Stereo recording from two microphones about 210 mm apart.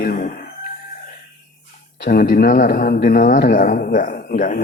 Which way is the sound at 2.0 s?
45° left (ahead or behind).